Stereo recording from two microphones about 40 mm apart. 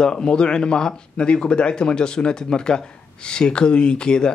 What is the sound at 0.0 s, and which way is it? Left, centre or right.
Speech, centre.